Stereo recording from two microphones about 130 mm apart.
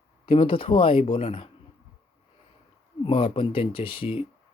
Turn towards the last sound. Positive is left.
turn(degrees=45)  # may be behind; listen again after turning